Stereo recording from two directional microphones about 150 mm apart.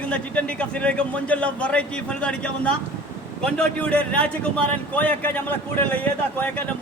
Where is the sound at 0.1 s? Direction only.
10° left (ahead or behind).